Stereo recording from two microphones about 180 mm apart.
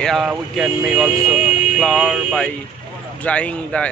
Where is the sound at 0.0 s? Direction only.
Centre (ahead or behind).